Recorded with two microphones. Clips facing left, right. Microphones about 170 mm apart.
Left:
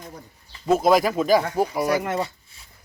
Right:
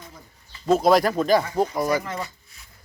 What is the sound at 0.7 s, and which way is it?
Speech, 5° left (ahead or behind).